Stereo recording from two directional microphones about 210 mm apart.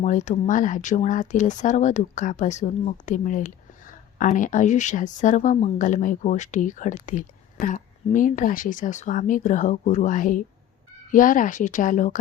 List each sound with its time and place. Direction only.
0.0 s speech: 35° left (ahead or behind)